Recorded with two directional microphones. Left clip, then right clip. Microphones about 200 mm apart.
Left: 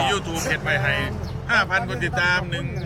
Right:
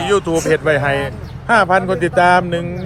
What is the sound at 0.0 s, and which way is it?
Speech, 5° right (ahead or behind).